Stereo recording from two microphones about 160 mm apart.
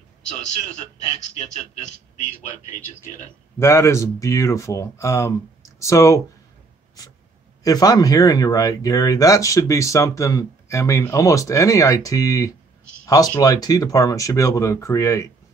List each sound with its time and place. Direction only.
3.5 s speech: 15° left (ahead or behind)
7.0 s writing: 25° left (ahead or behind)
7.6 s speech: 25° left (ahead or behind)